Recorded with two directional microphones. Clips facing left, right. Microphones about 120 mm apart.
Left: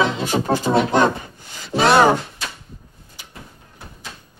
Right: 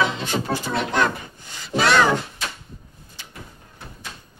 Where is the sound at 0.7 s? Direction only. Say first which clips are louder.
Left 11 dB; 30° left (ahead or behind).